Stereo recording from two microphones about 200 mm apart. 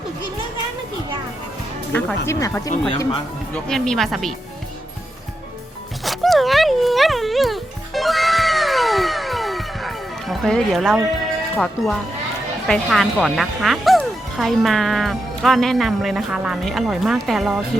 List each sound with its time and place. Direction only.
1.9 s speech: 10° left (ahead or behind)
3.5 s speech: 5° left (ahead or behind)
6.1 s music: centre (ahead or behind)
11.5 s speech: 5° left (ahead or behind)